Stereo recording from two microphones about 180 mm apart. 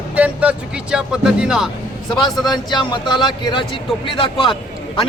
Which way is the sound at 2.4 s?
25° left (ahead or behind).